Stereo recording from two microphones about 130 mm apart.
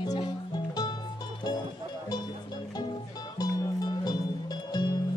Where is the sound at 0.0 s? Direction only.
30° left (ahead or behind).